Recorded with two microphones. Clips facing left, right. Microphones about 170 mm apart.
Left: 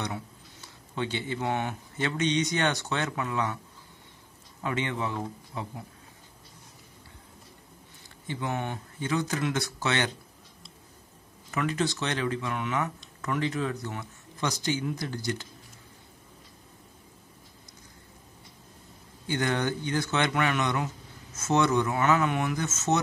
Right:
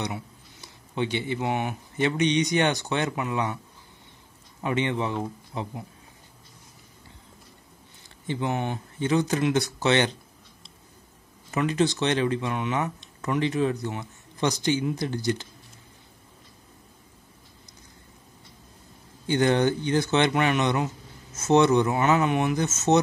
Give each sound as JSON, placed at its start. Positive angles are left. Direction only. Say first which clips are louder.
{"t": 0.0, "sound": "speech", "louder": "right 2 dB", "side_deg": -15}
{"t": 4.6, "sound": "speech", "louder": "right 4 dB", "side_deg": -20}
{"t": 8.3, "sound": "speech", "louder": "right 4 dB", "side_deg": -20}
{"t": 11.5, "sound": "speech", "louder": "right 5 dB", "side_deg": -20}
{"t": 19.2, "sound": "speech", "louder": "right 7 dB", "side_deg": -25}